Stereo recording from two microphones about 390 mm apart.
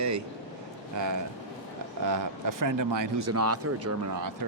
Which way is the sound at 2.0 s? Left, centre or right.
Right.